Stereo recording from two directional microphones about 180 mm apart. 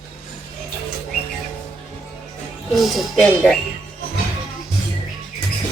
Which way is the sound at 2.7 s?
Centre (ahead or behind).